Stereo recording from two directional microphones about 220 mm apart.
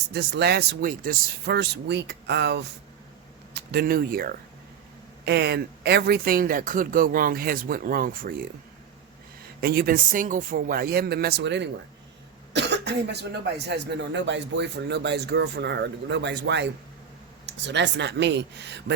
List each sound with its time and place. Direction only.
0.1 s speech: 50° right (ahead or behind)
9.6 s speech: 45° right (ahead or behind)